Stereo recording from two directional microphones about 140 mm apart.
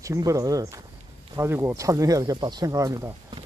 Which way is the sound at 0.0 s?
25° right (ahead or behind).